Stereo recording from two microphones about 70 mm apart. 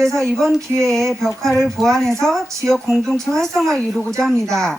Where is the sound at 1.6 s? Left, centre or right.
Centre.